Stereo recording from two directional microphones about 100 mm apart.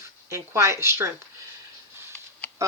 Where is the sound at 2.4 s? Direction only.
20° left (ahead or behind).